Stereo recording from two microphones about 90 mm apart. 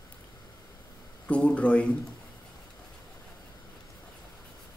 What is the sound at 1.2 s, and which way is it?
Speech, 15° left (ahead or behind).